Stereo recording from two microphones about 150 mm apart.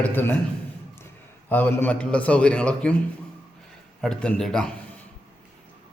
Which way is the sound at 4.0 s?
5° left (ahead or behind).